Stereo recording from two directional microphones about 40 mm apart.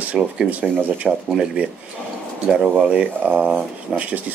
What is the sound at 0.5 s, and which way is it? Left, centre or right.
Speech, right.